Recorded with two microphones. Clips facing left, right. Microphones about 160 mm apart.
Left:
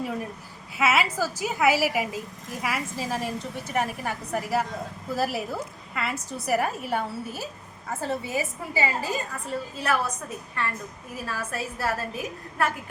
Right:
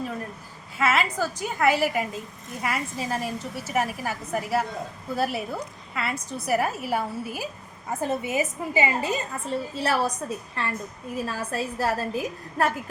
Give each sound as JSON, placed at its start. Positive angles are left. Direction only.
{"t": 0.8, "sound": "a woman's voice", "side_deg": 5}